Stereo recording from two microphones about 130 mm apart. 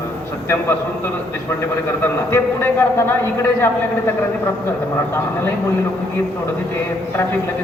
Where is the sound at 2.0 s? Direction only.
20° left (ahead or behind).